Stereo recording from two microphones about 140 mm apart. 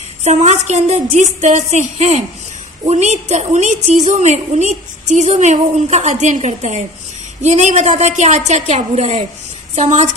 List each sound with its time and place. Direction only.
0.2 s a woman's voice: 55° right (ahead or behind)